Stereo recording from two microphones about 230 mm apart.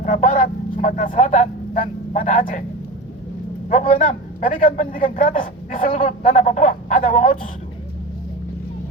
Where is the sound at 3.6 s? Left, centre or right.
Left.